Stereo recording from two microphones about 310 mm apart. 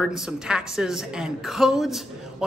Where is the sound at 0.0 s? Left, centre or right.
Centre.